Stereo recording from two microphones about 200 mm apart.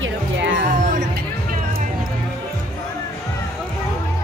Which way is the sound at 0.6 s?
40° right (ahead or behind).